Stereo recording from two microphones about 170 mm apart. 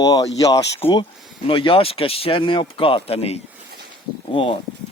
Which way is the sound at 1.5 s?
30° left (ahead or behind).